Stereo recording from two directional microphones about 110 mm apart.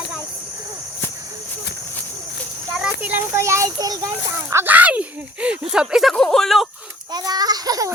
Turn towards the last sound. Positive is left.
turn(degrees=-35)  # may be behind; listen again after turning